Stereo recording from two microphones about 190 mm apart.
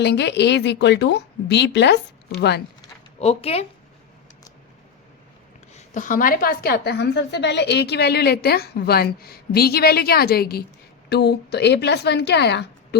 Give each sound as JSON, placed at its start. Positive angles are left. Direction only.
{"t": 0.0, "sound": "a woman's voice", "side_deg": 65}
{"t": 3.2, "sound": "speech", "side_deg": 35}
{"t": 5.7, "sound": "a woman's voice", "side_deg": 40}